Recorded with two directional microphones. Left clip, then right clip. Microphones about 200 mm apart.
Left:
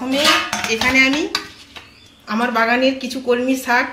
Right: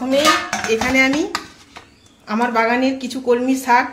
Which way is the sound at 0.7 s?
60° right (ahead or behind).